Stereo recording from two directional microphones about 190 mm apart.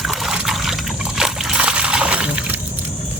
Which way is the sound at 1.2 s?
5° right (ahead or behind).